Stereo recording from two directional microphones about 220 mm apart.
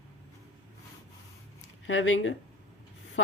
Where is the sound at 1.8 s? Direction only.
60° left (ahead or behind).